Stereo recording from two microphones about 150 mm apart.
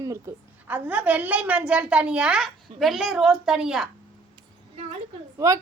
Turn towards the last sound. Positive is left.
turn(degrees=-20)  # may be behind; listen again after turning